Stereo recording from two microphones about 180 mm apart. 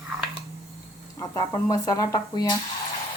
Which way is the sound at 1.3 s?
20° left (ahead or behind).